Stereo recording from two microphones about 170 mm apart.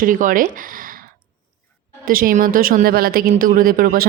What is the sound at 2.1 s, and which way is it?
Speech, 55° right (ahead or behind).